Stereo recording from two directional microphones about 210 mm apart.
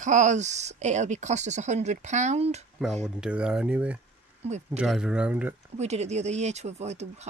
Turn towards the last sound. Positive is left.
turn(degrees=-30)  # may be behind; listen again after turning